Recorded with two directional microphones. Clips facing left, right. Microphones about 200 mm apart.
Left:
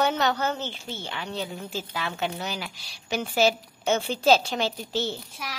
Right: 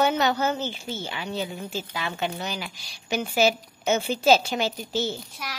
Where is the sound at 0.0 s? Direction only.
5° right (ahead or behind).